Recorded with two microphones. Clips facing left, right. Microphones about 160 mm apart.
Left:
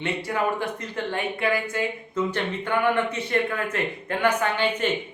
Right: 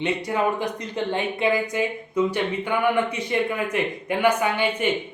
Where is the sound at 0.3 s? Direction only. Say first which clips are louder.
Even; 20° right (ahead or behind).